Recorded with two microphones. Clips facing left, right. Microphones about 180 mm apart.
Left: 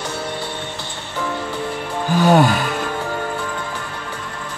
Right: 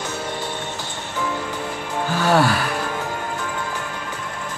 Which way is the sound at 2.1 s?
20° left (ahead or behind).